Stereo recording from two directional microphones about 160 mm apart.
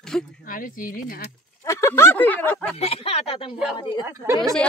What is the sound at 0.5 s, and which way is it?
Speech, 60° left (ahead or behind).